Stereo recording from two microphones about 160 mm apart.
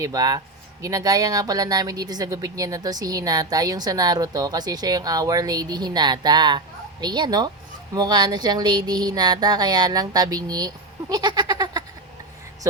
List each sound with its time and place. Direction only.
0.0 s speech: 20° right (ahead or behind)